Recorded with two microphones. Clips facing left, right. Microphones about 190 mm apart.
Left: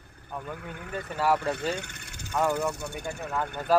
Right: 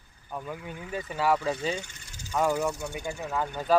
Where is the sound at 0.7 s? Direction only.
60° left (ahead or behind).